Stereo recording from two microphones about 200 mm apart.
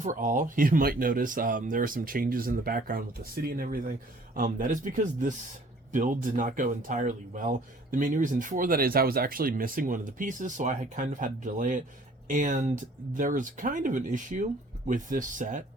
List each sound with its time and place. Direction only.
0.0 s speech: 40° right (ahead or behind)